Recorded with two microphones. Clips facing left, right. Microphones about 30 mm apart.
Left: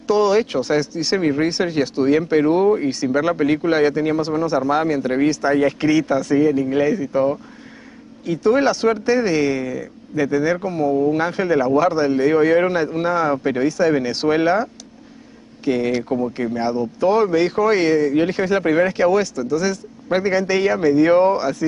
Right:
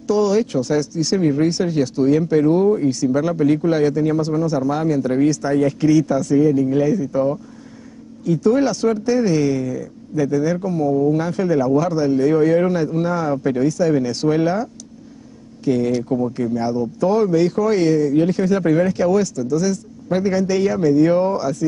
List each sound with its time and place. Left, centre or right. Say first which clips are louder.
0.0 s speech: left 1 dB; left